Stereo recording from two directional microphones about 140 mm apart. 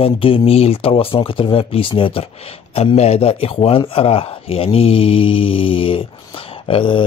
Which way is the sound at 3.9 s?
40° left (ahead or behind).